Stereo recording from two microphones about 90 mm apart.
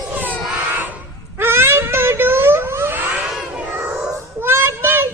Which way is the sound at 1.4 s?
25° right (ahead or behind).